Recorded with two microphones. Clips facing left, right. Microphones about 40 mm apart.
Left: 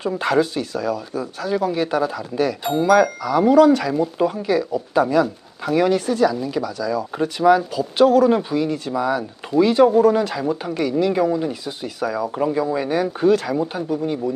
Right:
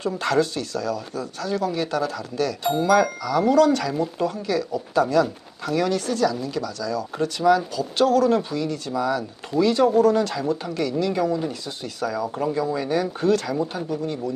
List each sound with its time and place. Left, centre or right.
0.0 s speech: centre